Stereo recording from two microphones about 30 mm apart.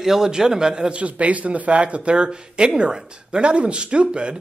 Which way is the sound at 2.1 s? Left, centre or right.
Right.